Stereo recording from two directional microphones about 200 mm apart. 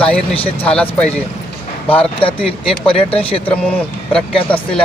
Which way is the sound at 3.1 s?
30° left (ahead or behind).